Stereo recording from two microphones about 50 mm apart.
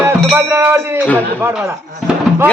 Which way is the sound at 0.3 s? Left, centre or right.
Right.